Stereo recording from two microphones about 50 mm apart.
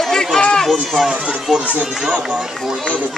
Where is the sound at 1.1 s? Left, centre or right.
Right.